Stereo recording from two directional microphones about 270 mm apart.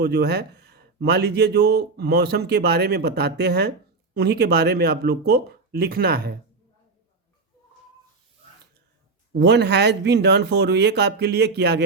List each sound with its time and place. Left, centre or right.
0.0 s speech: right
9.4 s speech: right